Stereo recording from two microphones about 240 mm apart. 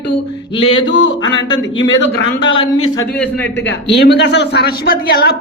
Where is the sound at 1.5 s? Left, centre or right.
Centre.